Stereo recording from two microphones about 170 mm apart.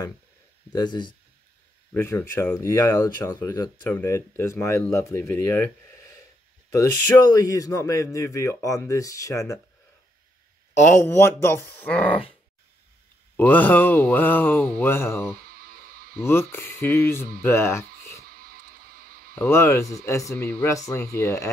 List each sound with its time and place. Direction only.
0.7 s speech: 25° left (ahead or behind)
2.0 s speech: 15° left (ahead or behind)
6.7 s speech: 20° left (ahead or behind)
10.8 s speech: 10° left (ahead or behind)
13.4 s speech: 10° left (ahead or behind)
15.5 s music: 60° right (ahead or behind)
16.2 s speech: 15° left (ahead or behind)
18.3 s music: 60° right (ahead or behind)
19.3 s speech: 15° left (ahead or behind)
20.4 s speech: 5° left (ahead or behind)
20.7 s speech: 20° left (ahead or behind)